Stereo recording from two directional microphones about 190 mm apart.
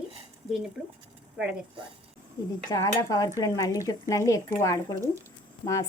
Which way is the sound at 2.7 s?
20° left (ahead or behind).